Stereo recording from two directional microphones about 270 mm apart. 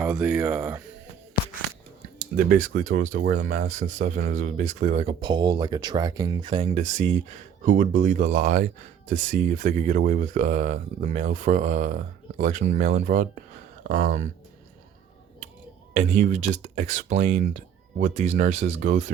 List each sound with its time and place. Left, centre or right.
0.0 s speech: centre
2.1 s speech: right
16.0 s speech: right